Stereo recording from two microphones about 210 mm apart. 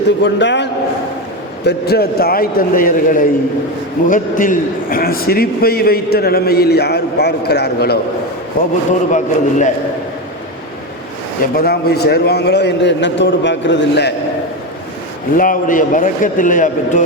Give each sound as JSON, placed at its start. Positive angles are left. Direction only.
{"t": 0.2, "sound": "a man's voice", "side_deg": 55}
{"t": 11.5, "sound": "a man's voice", "side_deg": 45}
{"t": 15.4, "sound": "a man's voice", "side_deg": 40}